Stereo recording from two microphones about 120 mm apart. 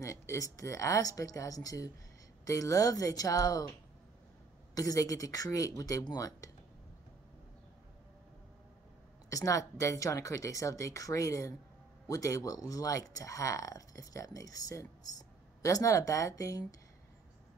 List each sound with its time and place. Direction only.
0.0 s speech: 25° left (ahead or behind)
4.7 s speech: 30° left (ahead or behind)
9.3 s speech: 25° left (ahead or behind)